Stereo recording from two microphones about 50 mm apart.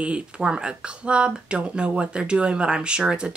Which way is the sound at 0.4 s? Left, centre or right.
Centre.